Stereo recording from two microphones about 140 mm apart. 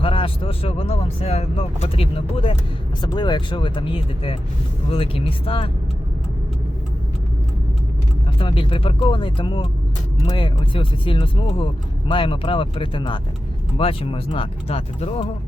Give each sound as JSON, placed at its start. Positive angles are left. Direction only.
{"t": 0.0, "sound": "speech", "side_deg": 40}
{"t": 8.4, "sound": "speech", "side_deg": 40}